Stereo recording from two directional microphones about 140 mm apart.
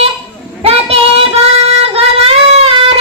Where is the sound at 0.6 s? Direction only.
45° right (ahead or behind).